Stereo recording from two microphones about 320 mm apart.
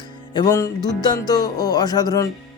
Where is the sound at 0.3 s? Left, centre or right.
Centre.